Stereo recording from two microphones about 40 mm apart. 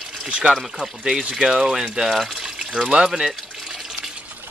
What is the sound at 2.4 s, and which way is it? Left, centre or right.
Speech, centre.